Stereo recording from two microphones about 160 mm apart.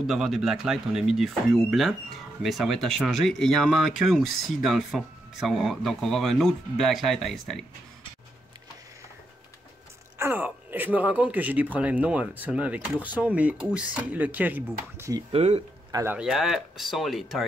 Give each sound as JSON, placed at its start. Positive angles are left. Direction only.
{"t": 0.0, "sound": "speech", "side_deg": 0}
{"t": 10.1, "sound": "speech", "side_deg": -15}
{"t": 15.3, "sound": "speech", "side_deg": -40}
{"t": 15.9, "sound": "speech", "side_deg": -20}
{"t": 16.2, "sound": "speech", "side_deg": 0}